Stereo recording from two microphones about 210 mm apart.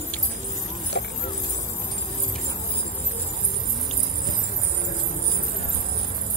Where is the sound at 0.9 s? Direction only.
55° left (ahead or behind).